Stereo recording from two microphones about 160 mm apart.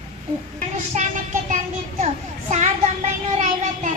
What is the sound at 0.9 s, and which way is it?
Speech, 55° right (ahead or behind).